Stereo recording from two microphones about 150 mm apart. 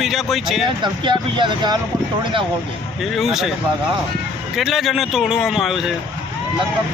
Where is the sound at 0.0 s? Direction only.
Centre (ahead or behind).